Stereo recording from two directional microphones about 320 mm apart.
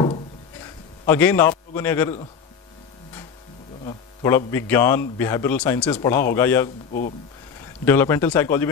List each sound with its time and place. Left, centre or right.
0.0 s a sound: centre
1.8 s speech: centre
3.8 s a sound: centre
4.5 s speech: centre
6.9 s speech: left
7.8 s speech: centre